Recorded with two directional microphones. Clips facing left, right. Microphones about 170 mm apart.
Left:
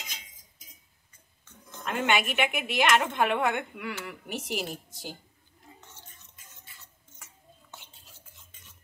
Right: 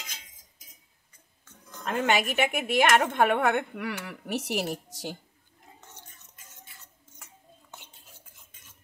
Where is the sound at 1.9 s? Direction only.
40° right (ahead or behind); by 5.1 s 70° right (ahead or behind).